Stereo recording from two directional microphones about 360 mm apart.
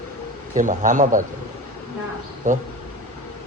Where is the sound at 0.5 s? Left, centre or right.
Right.